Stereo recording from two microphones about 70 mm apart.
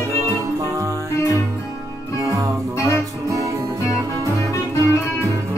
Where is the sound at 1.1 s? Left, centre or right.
Left.